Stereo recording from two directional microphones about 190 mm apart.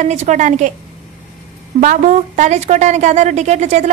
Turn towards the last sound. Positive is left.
turn(degrees=-35)  # may be behind; listen again after turning